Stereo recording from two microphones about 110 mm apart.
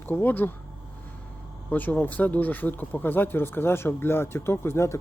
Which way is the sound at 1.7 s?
15° left (ahead or behind).